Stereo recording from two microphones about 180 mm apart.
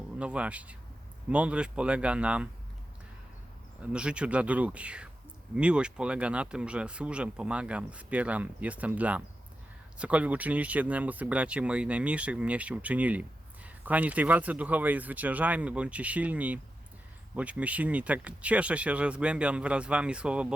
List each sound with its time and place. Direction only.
0.2 s speech: 5° right (ahead or behind)
3.8 s speech: 5° right (ahead or behind)